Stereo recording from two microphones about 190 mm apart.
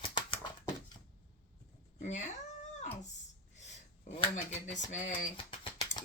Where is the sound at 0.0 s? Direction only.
25° left (ahead or behind).